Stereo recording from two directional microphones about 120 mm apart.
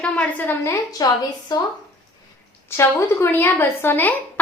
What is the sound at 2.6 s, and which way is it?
A woman's voice, 20° left (ahead or behind).